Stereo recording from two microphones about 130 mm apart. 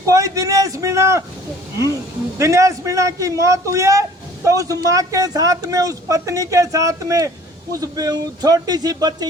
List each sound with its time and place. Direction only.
0.0 s speech: 25° right (ahead or behind)
2.4 s speech: 25° right (ahead or behind)